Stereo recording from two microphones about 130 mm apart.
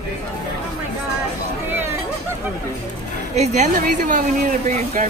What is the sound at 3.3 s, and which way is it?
Speech, 60° right (ahead or behind).